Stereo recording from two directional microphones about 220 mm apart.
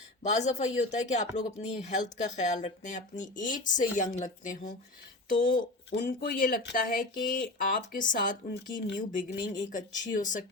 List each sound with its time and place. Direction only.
0.2 s speech: 30° left (ahead or behind)
5.5 s speech: 45° left (ahead or behind)